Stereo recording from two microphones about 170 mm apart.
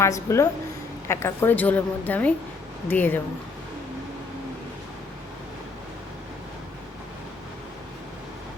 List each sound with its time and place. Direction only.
0.0 s a woman's voice: 15° left (ahead or behind)